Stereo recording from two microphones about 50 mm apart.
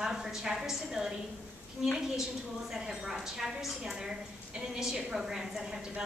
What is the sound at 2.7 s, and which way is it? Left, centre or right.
A woman's voice, centre.